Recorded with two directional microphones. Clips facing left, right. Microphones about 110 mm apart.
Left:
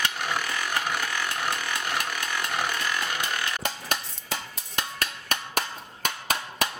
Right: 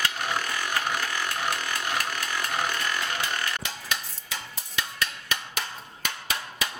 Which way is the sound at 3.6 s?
45° left (ahead or behind).